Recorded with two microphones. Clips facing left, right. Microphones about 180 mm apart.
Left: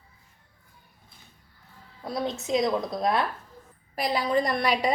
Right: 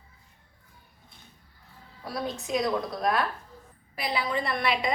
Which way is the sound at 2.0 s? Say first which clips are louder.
Left 3 dB; 25° left (ahead or behind).